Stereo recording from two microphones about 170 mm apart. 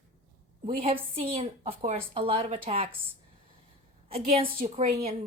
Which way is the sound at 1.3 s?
35° right (ahead or behind).